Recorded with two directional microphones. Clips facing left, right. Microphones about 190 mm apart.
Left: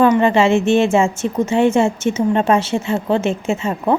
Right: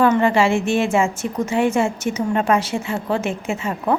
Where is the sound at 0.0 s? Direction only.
20° left (ahead or behind).